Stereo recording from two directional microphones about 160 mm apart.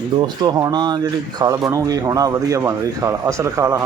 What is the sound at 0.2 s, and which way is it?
Speech, 25° right (ahead or behind).